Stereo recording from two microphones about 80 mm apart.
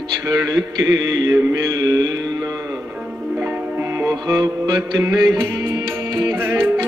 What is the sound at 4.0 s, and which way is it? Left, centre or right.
Music, right.